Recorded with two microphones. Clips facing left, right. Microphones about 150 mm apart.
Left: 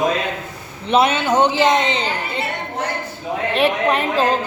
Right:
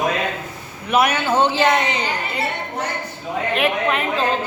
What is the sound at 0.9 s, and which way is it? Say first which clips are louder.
A man's voice: left 2 dB; 25° left (ahead or behind).